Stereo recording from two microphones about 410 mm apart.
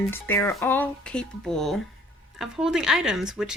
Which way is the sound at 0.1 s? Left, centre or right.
Centre.